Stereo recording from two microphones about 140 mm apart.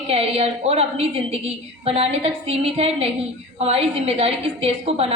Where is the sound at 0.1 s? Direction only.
45° right (ahead or behind).